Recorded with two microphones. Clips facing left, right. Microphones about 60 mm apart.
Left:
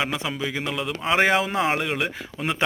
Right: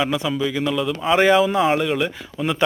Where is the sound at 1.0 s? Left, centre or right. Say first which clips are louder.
Right 5 dB; centre.